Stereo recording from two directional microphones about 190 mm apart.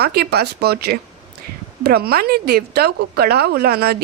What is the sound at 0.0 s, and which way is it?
Speech, 55° right (ahead or behind).